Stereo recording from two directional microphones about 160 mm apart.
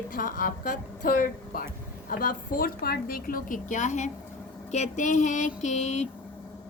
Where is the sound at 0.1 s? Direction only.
55° left (ahead or behind).